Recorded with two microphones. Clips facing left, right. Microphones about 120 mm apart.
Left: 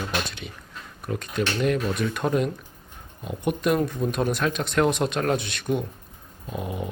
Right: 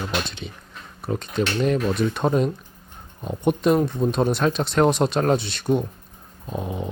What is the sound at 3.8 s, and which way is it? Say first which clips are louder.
Speech: right 3 dB; 15° right (ahead or behind).